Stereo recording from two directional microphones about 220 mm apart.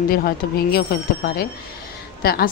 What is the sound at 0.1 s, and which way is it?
A woman's voice, 45° left (ahead or behind).